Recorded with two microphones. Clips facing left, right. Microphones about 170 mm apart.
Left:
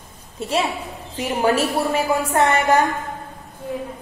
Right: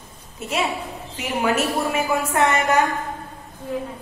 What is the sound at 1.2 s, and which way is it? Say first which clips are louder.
A woman's voice: left 3 dB; 35° left (ahead or behind).